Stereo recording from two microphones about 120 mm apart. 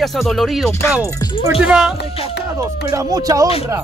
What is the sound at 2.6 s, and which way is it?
Speech, 30° right (ahead or behind).